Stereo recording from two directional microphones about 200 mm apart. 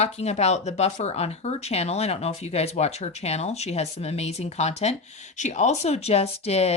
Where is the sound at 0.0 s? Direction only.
35° left (ahead or behind).